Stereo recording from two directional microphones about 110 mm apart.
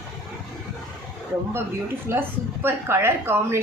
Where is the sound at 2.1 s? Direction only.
20° right (ahead or behind).